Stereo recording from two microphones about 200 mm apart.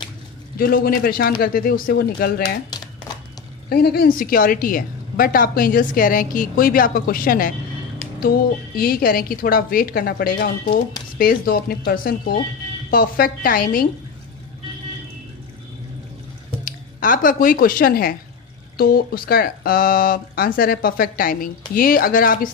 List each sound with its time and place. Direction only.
0.6 s a woman's voice: 50° left (ahead or behind)
3.6 s a woman's voice: 50° left (ahead or behind)
16.6 s a woman's voice: 45° left (ahead or behind)